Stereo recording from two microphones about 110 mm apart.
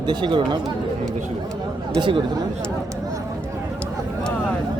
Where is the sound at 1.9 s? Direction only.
45° right (ahead or behind).